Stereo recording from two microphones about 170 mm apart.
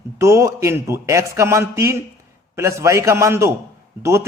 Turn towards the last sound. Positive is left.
turn(degrees=-15)  # may be behind; listen again after turning